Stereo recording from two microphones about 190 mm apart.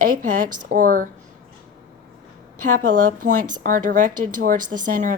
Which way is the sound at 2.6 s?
45° right (ahead or behind).